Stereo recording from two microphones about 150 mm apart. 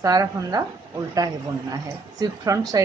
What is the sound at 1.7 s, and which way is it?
A woman's voice, 25° right (ahead or behind).